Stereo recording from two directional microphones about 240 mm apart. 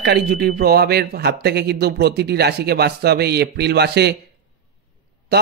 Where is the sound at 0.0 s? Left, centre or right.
Right.